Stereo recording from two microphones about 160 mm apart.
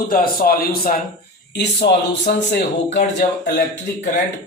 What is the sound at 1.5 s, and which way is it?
A man's voice, 90° left.